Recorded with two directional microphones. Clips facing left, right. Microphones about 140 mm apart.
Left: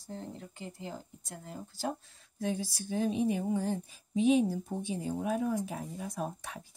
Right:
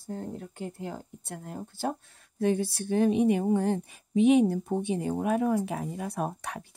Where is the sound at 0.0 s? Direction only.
50° right (ahead or behind).